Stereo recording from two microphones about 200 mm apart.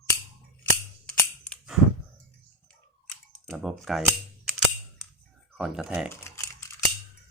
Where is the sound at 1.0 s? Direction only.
5° left (ahead or behind).